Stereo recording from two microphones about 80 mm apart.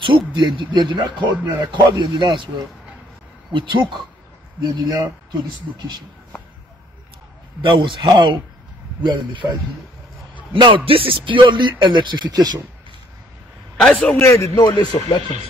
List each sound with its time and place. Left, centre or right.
0.0 s speech: right
1.3 s speech: right
1.7 s a man's voice: right
3.5 s speech: right
4.6 s a man's voice: right
7.6 s speech: right
9.0 s speech: right
11.8 s a man's voice: right
13.7 s a man's voice: centre
14.2 s speech: left
14.6 s speech: left